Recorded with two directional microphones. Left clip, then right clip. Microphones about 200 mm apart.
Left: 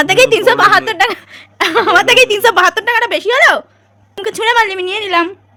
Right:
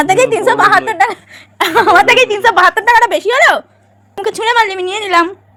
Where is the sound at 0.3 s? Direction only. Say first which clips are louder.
Even; 20° left (ahead or behind).